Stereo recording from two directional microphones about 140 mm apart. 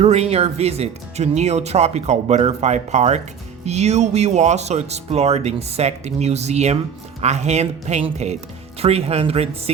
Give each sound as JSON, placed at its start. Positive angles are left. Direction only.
{"t": 0.0, "sound": "speech", "side_deg": -50}